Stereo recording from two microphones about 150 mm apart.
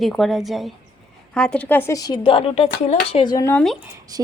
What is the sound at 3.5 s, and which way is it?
Speech, 10° left (ahead or behind).